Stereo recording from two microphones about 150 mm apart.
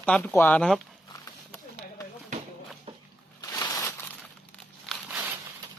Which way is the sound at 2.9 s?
40° right (ahead or behind).